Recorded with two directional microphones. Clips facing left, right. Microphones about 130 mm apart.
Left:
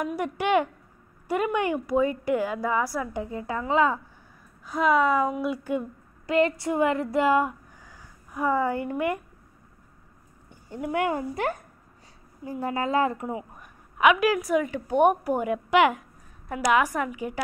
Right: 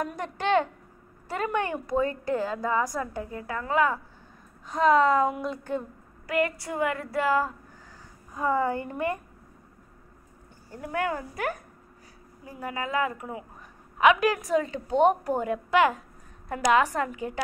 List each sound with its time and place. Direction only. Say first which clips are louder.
0.0 s a woman's voice: left 3 dB; 10° left (ahead or behind)
4.6 s a woman's voice: right 1 dB; 5° left (ahead or behind)
6.2 s a woman's voice: left 4 dB; 25° left (ahead or behind)
10.7 s a woman's voice: left 3 dB; 20° left (ahead or behind)
14.4 s a woman's voice: left 1 dB; 10° left (ahead or behind)